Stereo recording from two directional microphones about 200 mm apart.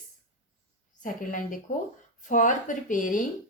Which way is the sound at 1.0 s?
40° left (ahead or behind).